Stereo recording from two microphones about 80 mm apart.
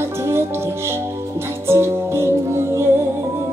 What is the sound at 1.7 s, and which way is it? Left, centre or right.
Music, right.